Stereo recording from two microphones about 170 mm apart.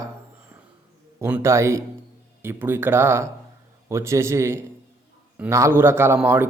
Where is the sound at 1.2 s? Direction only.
15° right (ahead or behind).